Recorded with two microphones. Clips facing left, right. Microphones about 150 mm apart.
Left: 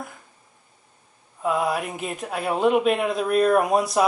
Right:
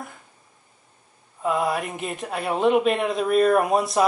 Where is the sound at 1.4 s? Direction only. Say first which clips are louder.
Even; centre (ahead or behind).